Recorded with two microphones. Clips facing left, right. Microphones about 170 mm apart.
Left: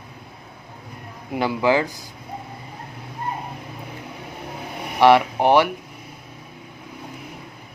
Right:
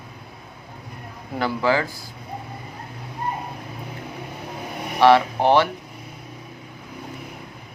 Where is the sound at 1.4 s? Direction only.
20° left (ahead or behind).